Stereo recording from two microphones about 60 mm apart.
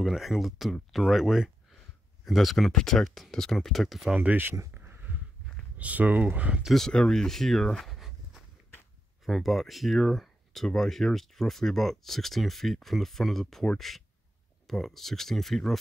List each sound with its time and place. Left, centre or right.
0.0 s speech: centre
4.1 s speech: right
4.7 s a sound: right
5.8 s speech: right
6.9 s speech: centre
9.2 s speech: centre